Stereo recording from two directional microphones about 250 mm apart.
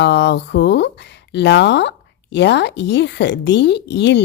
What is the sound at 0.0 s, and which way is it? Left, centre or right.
Speech, left.